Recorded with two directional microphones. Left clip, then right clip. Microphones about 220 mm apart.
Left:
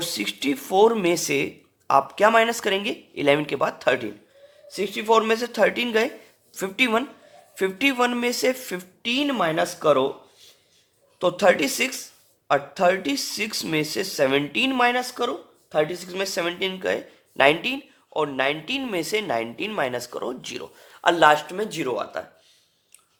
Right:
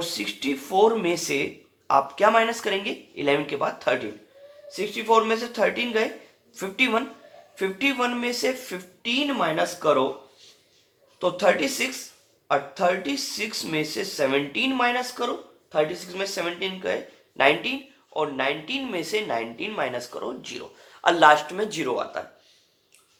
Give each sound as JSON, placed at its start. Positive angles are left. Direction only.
{"t": 0.0, "sound": "speech", "side_deg": 45}